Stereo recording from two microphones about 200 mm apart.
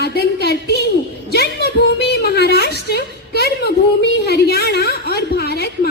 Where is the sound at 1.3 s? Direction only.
55° left (ahead or behind).